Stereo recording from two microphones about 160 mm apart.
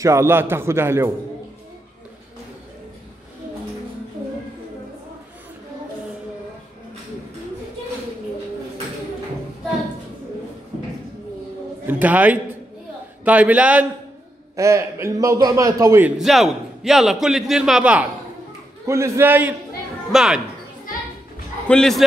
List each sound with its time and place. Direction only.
0.0 s a man's voice: 15° right (ahead or behind)
11.9 s a man's voice: 10° right (ahead or behind)
14.5 s a man's voice: 20° right (ahead or behind)
16.2 s a man's voice: centre (ahead or behind)
18.9 s a man's voice: 15° right (ahead or behind)
21.6 s a man's voice: 5° left (ahead or behind)